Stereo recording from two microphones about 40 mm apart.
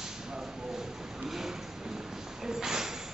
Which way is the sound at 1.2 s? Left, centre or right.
Centre.